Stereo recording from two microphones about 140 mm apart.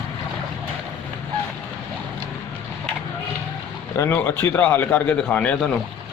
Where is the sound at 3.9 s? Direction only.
15° left (ahead or behind).